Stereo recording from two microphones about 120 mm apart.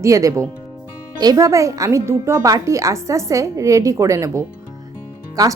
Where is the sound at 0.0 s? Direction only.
25° right (ahead or behind).